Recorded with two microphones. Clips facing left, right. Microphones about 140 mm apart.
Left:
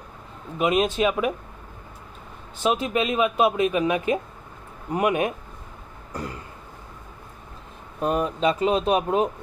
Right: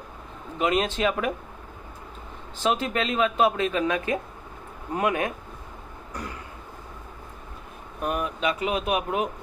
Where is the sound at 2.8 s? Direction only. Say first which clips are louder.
Left 2 dB; 10° left (ahead or behind).